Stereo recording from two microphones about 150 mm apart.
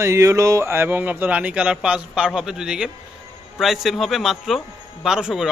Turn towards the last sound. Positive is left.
turn(degrees=-5)  # may be behind; listen again after turning